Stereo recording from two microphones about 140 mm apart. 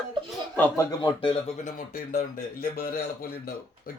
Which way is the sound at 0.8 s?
30° left (ahead or behind).